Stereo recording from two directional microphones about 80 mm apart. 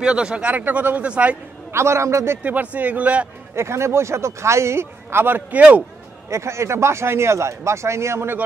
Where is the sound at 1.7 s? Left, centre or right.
Right.